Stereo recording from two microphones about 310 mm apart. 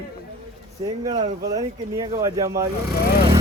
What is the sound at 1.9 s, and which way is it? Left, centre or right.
Speech, centre.